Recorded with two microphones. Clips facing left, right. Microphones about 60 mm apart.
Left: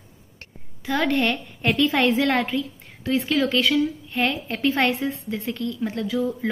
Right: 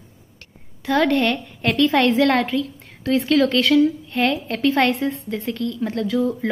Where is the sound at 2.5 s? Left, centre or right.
Centre.